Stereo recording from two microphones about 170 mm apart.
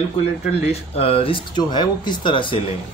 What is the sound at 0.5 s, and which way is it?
Speech, 40° left (ahead or behind).